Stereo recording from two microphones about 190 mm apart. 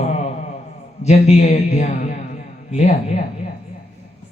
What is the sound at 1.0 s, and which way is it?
A man's voice, 35° left (ahead or behind).